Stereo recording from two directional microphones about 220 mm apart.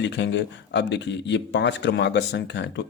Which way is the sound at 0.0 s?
55° left (ahead or behind).